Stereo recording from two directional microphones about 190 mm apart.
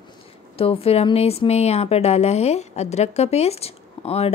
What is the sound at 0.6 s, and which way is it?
Speech, 30° left (ahead or behind).